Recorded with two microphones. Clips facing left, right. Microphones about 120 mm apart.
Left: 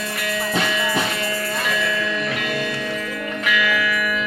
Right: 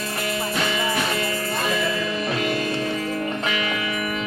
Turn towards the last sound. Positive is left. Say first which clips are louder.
# left 3 dB
turn(degrees=-30)  # may be behind; listen again after turning